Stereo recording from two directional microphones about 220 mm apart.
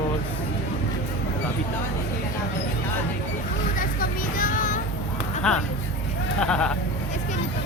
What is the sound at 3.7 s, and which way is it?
Vehicle, 40° left (ahead or behind).